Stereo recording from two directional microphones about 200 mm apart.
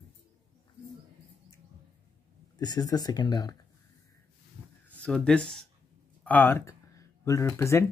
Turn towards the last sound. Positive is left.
turn(degrees=15)  # may be behind; listen again after turning